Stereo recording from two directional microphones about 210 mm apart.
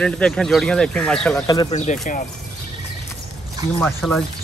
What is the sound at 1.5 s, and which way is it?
Speech, 20° left (ahead or behind).